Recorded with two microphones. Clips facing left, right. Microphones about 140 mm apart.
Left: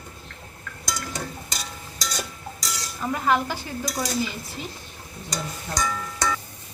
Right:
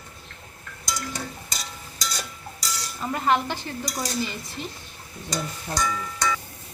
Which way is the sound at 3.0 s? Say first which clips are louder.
Even; 5° left (ahead or behind).